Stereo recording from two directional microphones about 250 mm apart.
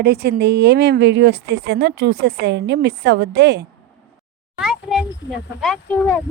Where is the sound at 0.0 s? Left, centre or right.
Right.